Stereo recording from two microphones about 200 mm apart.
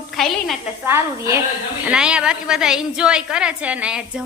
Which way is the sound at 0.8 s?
15° right (ahead or behind).